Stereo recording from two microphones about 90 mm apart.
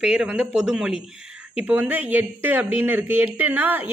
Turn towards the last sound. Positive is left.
turn(degrees=-20)  # may be behind; listen again after turning